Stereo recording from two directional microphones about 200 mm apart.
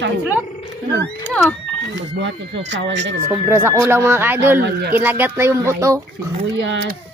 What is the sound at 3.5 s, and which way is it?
A man's voice, 10° right (ahead or behind).